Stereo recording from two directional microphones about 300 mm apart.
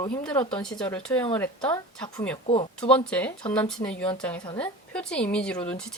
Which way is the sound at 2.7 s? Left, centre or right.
Centre.